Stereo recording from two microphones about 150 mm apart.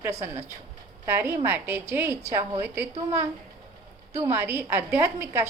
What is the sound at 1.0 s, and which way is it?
A woman's voice, 15° right (ahead or behind).